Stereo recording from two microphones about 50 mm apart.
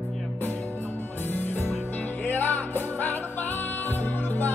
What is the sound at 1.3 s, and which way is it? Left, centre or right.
Music, left.